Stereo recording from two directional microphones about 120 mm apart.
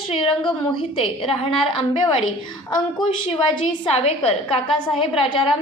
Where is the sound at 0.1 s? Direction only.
45° left (ahead or behind).